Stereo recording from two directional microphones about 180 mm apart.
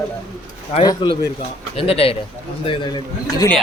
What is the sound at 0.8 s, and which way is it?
A man's voice, 30° left (ahead or behind).